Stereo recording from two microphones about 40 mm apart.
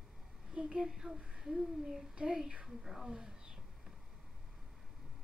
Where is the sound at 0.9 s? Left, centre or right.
Centre.